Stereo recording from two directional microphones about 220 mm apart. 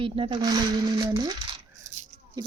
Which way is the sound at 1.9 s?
35° right (ahead or behind).